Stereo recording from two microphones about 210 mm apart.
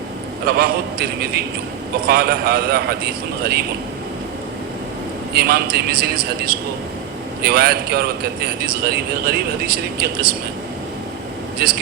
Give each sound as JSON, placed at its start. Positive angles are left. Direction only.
{"t": 0.4, "sound": "speech", "side_deg": -45}
{"t": 5.3, "sound": "speech", "side_deg": -50}
{"t": 7.4, "sound": "speech", "side_deg": -50}
{"t": 11.6, "sound": "a man's voice", "side_deg": -50}